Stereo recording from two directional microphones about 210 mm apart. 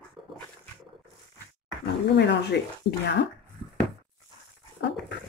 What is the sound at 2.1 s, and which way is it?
Speech, 55° left (ahead or behind).